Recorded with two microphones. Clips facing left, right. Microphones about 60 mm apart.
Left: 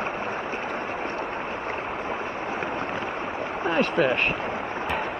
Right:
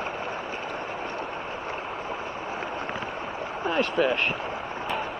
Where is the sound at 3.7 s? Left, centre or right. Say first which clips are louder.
Left 2 dB; left.